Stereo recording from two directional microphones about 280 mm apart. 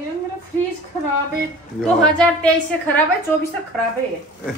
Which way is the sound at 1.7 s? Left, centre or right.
Centre.